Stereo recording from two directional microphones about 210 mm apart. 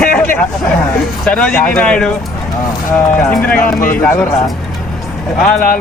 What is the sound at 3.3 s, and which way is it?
Speech, 5° left (ahead or behind).